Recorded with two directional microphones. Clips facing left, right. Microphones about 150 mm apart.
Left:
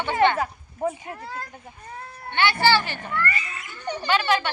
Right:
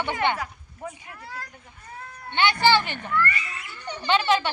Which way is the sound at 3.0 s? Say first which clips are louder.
Right 1 dB; 25° left (ahead or behind).